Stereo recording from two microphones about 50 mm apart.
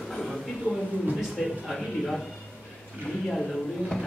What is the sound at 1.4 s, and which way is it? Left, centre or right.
Speech, centre.